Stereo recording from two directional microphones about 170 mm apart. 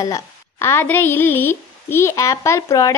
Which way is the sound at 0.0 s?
15° left (ahead or behind).